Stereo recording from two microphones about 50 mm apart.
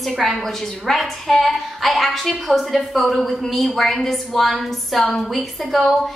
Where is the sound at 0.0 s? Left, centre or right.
Centre.